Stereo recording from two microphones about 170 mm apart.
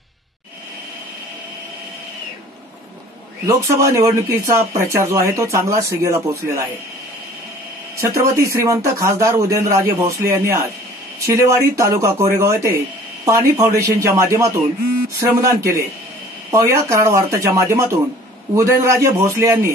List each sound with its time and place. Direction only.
3.4 s speech: 15° right (ahead or behind)
8.0 s speech: 15° right (ahead or behind)